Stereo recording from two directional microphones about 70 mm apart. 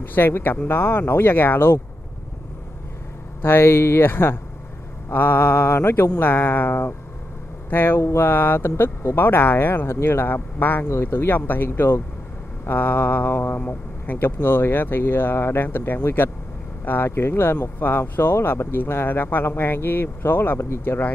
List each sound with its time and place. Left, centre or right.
0.0 s speech: left
3.4 s speech: left
5.1 s a sound: left
7.7 s speech: left